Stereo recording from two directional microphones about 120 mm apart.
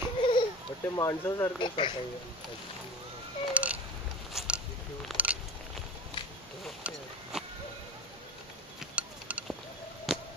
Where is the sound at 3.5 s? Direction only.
10° right (ahead or behind).